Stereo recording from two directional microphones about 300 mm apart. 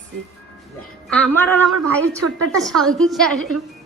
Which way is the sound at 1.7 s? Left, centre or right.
Right.